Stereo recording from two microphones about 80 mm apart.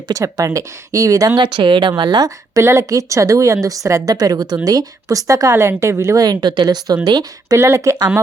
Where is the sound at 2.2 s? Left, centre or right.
Right.